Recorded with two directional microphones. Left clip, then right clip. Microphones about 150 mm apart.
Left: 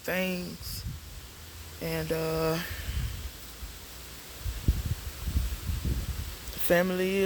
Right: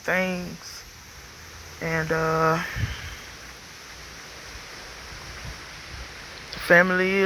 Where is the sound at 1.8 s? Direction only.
35° left (ahead or behind).